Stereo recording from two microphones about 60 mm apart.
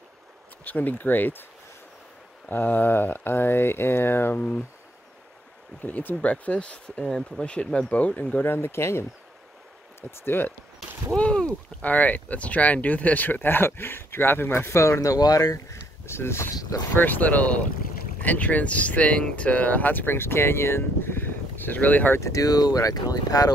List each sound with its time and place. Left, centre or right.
0.7 s speech: left
2.5 s speech: left
4.4 s speech: left
5.8 s speech: left
8.5 s speech: left
10.2 s speech: left
11.1 s speech: centre; by 14.8 s left
14.8 s speech: left
15.5 s speech: left
16.9 s speech: left
22.2 s speech: left